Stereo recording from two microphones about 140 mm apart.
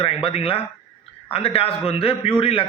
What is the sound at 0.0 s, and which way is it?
A man's voice, 45° left (ahead or behind).